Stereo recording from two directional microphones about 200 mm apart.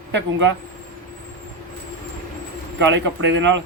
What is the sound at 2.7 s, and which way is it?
Speech, 65° right (ahead or behind).